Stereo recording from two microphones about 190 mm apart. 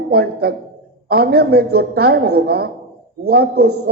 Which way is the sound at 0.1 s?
55° right (ahead or behind).